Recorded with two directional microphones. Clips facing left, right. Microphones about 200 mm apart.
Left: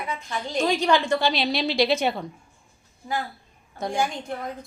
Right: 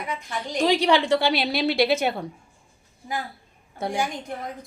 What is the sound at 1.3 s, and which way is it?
Speech, 5° right (ahead or behind).